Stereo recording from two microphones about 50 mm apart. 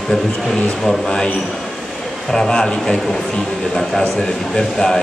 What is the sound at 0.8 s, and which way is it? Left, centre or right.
Speech, centre.